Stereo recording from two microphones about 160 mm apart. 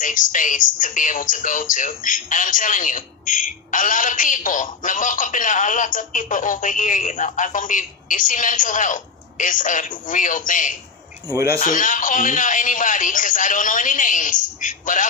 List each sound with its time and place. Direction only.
0.0 s a man's voice: 55° left (ahead or behind)
11.3 s speech: 20° right (ahead or behind)
11.6 s a man's voice: 55° left (ahead or behind)